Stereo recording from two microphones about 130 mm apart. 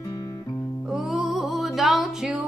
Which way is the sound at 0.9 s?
5° right (ahead or behind).